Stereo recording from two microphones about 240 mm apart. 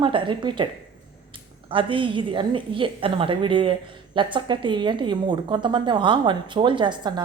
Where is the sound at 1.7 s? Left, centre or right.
Right.